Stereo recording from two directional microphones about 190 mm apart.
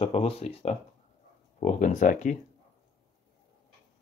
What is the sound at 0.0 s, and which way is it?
Speech, 30° left (ahead or behind).